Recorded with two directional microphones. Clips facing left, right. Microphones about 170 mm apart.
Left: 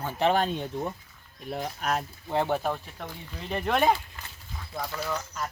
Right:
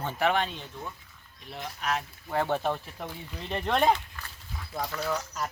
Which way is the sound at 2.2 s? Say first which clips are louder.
Left 1 dB; 15° left (ahead or behind).